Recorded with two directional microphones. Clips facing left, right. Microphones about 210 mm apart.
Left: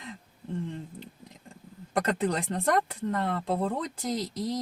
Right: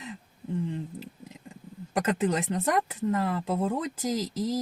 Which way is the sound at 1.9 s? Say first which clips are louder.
Right 1 dB; 5° right (ahead or behind).